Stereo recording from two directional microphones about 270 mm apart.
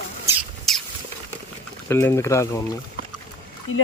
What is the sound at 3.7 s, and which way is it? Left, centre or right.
Speech, left.